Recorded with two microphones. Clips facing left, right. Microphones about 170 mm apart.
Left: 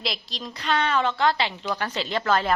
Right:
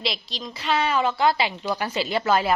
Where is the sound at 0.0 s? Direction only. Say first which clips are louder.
Right 2 dB; centre (ahead or behind).